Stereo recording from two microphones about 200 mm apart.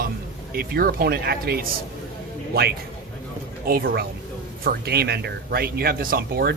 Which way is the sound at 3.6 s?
50° right (ahead or behind).